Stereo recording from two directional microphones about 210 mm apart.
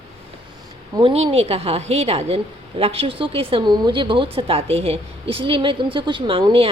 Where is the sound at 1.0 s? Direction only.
25° right (ahead or behind).